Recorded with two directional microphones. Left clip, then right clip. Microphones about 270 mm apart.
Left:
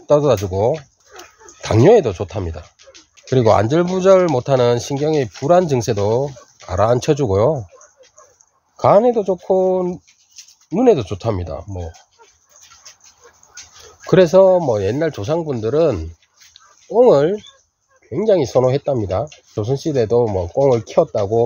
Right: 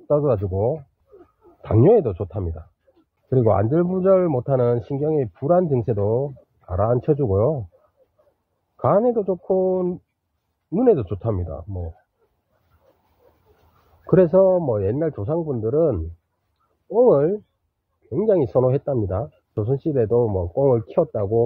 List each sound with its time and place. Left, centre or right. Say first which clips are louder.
0.0 s speech: left 6 dB; centre
8.7 s speech: left 6 dB; centre
14.0 s speech: left 5 dB; centre